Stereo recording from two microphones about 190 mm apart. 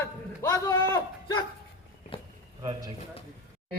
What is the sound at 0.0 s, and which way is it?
Speech, 15° left (ahead or behind).